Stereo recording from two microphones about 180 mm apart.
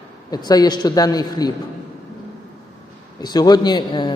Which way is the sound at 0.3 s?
20° left (ahead or behind).